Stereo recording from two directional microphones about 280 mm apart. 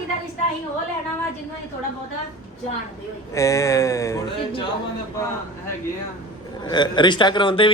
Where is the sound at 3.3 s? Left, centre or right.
Centre.